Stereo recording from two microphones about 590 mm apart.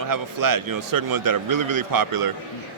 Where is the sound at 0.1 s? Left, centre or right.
Right.